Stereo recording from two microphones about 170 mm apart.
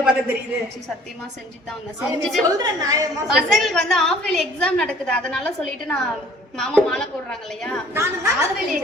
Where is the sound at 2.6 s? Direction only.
20° right (ahead or behind).